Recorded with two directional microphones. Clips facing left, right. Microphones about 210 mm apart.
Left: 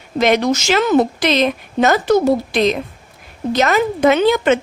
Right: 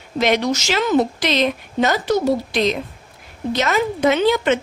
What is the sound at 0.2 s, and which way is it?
A woman's voice, 50° left (ahead or behind).